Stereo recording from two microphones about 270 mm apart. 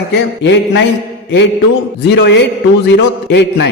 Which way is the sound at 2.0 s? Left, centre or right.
Left.